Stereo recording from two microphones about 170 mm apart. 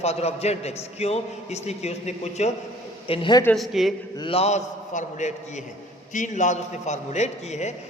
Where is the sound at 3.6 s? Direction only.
Centre (ahead or behind).